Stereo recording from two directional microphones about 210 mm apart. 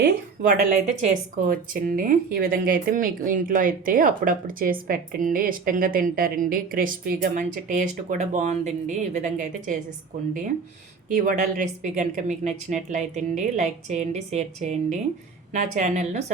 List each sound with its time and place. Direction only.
0.0 s speech: 40° right (ahead or behind)
11.1 s speech: 40° right (ahead or behind)